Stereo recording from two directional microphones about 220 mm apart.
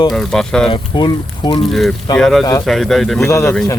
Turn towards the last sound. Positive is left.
turn(degrees=10)  # may be behind; listen again after turning